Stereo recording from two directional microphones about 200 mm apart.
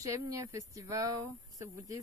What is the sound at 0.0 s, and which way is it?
Speech, 15° right (ahead or behind).